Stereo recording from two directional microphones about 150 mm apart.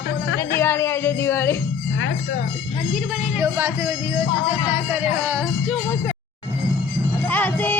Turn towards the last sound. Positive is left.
turn(degrees=10)  # may be behind; listen again after turning